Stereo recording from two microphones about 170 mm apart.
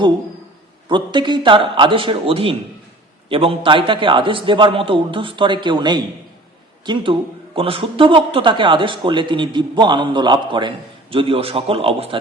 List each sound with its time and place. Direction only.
0.9 s a man's voice: 25° right (ahead or behind)